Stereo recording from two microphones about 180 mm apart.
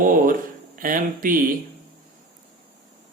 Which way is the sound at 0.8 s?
50° right (ahead or behind).